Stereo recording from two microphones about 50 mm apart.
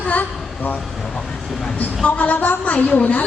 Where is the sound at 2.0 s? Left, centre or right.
Left.